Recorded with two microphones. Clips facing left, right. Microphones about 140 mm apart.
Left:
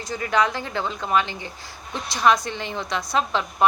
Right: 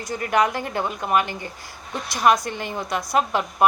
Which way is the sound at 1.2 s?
50° right (ahead or behind).